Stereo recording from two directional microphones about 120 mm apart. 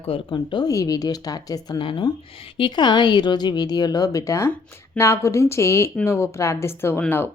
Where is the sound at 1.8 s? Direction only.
45° left (ahead or behind); by 7.0 s 20° left (ahead or behind).